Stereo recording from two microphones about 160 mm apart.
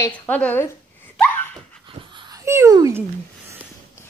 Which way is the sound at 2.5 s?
20° right (ahead or behind).